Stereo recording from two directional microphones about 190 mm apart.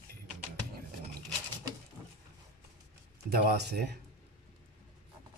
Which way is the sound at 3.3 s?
55° right (ahead or behind).